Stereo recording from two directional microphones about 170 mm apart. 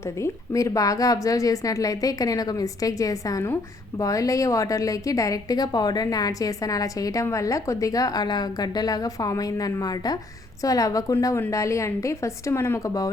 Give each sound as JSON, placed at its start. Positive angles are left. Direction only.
{"t": 0.0, "sound": "a woman's voice", "side_deg": 20}